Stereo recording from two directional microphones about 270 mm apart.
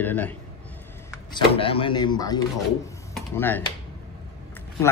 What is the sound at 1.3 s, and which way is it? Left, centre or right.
Speech, centre.